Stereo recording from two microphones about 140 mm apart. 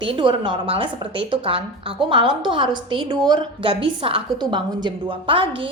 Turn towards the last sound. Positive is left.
turn(degrees=-40)  # may be behind; listen again after turning